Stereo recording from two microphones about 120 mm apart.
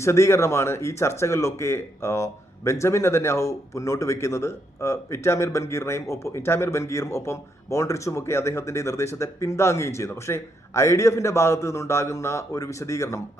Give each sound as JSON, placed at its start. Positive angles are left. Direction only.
{"t": 0.0, "sound": "speech", "side_deg": 25}